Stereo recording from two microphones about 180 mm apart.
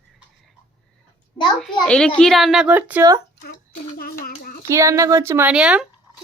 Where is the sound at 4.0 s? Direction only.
55° left (ahead or behind).